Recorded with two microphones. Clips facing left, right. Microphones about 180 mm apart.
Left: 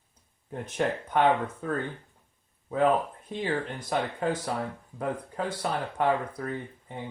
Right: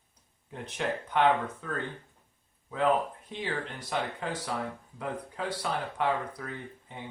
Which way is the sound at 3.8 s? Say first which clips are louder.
Left 4 dB; 45° left (ahead or behind).